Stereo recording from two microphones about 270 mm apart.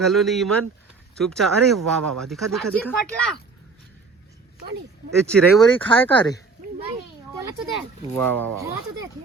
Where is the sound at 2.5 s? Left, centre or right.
Centre.